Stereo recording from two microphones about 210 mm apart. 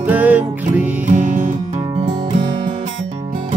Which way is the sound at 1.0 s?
35° right (ahead or behind).